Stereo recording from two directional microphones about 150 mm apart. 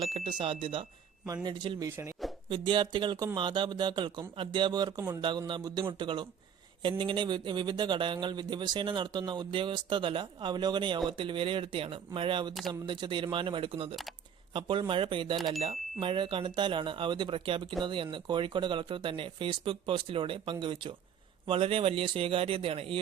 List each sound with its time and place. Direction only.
0.1 s speech: 35° right (ahead or behind)